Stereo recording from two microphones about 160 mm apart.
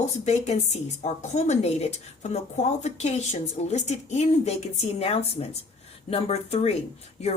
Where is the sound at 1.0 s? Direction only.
45° left (ahead or behind).